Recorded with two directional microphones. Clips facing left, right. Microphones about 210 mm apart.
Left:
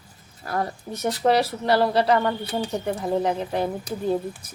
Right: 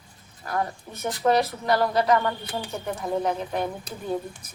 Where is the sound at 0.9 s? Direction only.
40° left (ahead or behind).